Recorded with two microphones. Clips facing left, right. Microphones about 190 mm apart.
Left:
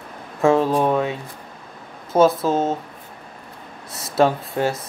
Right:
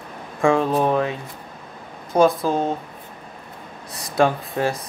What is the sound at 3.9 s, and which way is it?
Speech, 5° left (ahead or behind).